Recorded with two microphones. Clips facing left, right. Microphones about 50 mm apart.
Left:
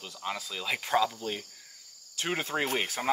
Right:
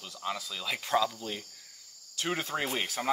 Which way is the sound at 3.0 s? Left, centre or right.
Centre.